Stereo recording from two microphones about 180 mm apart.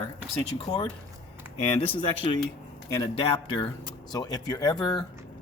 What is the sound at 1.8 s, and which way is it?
Speech, 30° left (ahead or behind).